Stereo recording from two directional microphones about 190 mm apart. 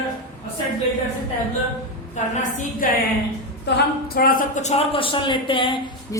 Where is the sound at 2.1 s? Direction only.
40° left (ahead or behind).